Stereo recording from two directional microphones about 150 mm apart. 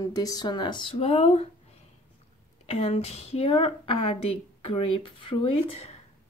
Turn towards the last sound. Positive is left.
turn(degrees=45)  # may be behind; listen again after turning